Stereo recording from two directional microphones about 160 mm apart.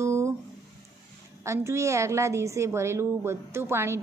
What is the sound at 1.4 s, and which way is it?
A woman's voice, 15° right (ahead or behind).